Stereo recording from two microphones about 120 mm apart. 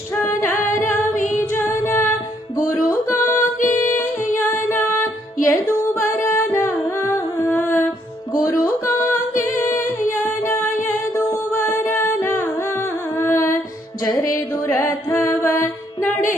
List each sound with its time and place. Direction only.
0.2 s female singing: 20° left (ahead or behind)
1.1 s a capella: 90° left
1.4 s singing: 20° left (ahead or behind)
2.6 s music: 20° left (ahead or behind)
3.3 s music: 90° left
4.4 s music: 20° left (ahead or behind)
6.2 s humming: 20° left (ahead or behind)
8.4 s music: 20° left (ahead or behind)